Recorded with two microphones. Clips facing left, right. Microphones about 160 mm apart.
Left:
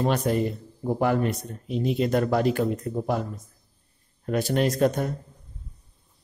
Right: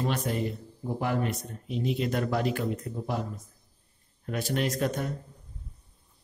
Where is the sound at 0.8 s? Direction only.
50° left (ahead or behind).